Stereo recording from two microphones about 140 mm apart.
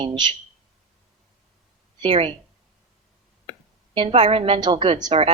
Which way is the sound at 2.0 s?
40° right (ahead or behind).